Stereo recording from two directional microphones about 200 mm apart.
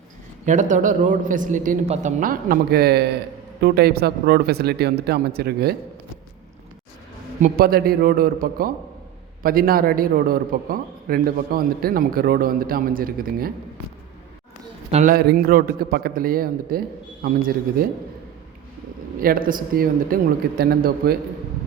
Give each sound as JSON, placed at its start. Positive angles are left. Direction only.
{"t": 0.4, "sound": "a man's voice", "side_deg": -40}
{"t": 7.4, "sound": "a man's voice", "side_deg": -45}
{"t": 14.8, "sound": "a man's voice", "side_deg": -35}
{"t": 15.1, "sound": "a man's voice", "side_deg": -50}
{"t": 19.2, "sound": "a man's voice", "side_deg": -45}